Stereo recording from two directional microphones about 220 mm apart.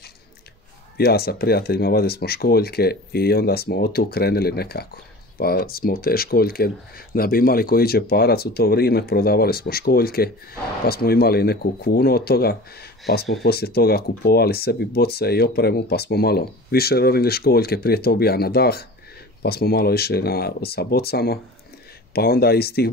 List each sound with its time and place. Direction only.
0.9 s speech: 45° left (ahead or behind)